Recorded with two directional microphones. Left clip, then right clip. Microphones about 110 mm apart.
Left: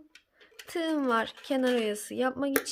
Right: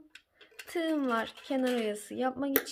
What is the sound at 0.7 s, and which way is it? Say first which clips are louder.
A woman's voice: left 3 dB; 30° left (ahead or behind).